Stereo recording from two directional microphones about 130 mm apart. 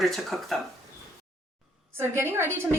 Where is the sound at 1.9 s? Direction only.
20° right (ahead or behind).